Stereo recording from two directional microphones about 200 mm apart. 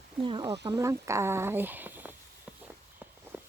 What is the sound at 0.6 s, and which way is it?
Speech, 15° right (ahead or behind).